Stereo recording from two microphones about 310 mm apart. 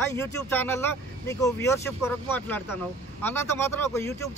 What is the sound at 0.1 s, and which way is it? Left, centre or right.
Speech, centre.